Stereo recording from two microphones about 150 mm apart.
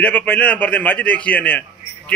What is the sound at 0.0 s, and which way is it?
A man's voice, 10° left (ahead or behind).